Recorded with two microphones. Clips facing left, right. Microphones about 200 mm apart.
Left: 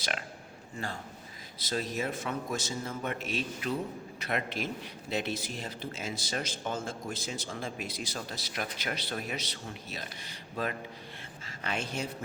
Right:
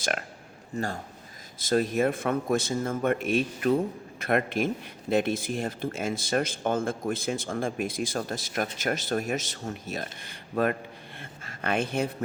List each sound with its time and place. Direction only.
0.0 s a man's voice: 50° right (ahead or behind)
1.5 s speech: 50° right (ahead or behind)